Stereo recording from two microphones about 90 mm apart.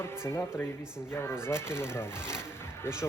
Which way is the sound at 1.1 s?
30° left (ahead or behind).